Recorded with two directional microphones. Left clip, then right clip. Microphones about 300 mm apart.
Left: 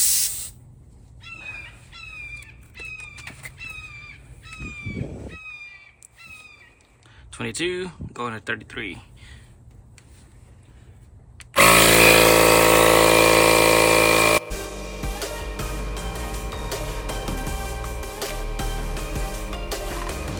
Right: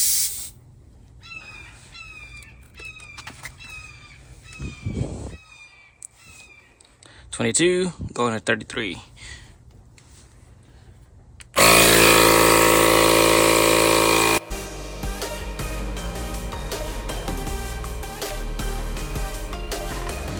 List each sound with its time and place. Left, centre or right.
7.0 s speech: centre
11.5 s tools: centre
15.2 s music: centre